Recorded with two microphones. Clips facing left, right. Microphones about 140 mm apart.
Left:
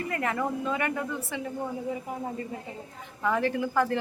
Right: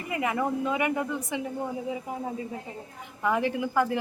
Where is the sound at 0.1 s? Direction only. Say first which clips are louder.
Right 4 dB; 10° right (ahead or behind).